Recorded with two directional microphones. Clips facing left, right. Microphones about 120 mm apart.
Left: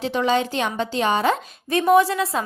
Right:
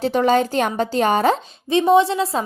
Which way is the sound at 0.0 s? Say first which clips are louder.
Right 4 dB; 40° right (ahead or behind).